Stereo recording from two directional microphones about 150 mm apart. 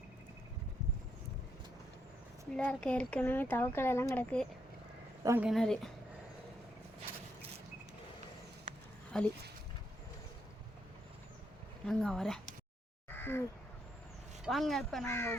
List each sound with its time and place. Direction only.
2.5 s speech: 5° left (ahead or behind)
5.2 s speech: 15° right (ahead or behind)
5.5 s speech: 5° left (ahead or behind)
8.7 s a sound: 60° right (ahead or behind)
9.1 s speech: 5° left (ahead or behind)
11.9 s speech: 5° left (ahead or behind)
13.1 s a sound: 15° left (ahead or behind)
14.4 s speech: centre (ahead or behind)
15.0 s speech: 15° left (ahead or behind)